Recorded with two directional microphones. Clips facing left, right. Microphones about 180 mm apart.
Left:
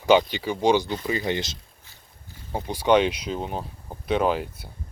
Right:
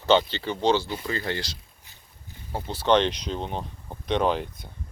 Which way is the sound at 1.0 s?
15° left (ahead or behind).